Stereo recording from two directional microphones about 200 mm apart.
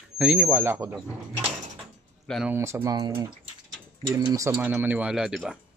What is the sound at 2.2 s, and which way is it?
Speech, centre (ahead or behind).